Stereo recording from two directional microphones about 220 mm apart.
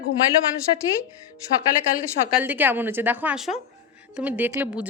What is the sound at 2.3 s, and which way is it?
Speech, 10° right (ahead or behind).